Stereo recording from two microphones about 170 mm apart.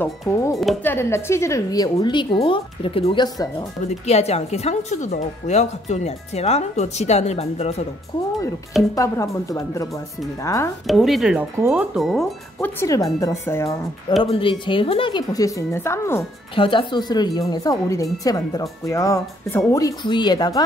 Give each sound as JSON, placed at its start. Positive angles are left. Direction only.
{"t": 0.8, "sound": "a woman's voice", "side_deg": 15}
{"t": 8.9, "sound": "speech", "side_deg": 20}
{"t": 10.9, "sound": "speech", "side_deg": 0}
{"t": 12.5, "sound": "a woman's voice", "side_deg": 15}
{"t": 14.2, "sound": "speech", "side_deg": 30}
{"t": 16.5, "sound": "speech", "side_deg": 30}